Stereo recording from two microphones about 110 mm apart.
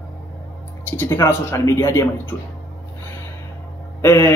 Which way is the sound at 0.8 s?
20° left (ahead or behind).